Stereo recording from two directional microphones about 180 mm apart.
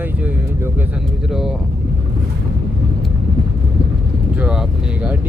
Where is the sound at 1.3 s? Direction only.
Centre (ahead or behind).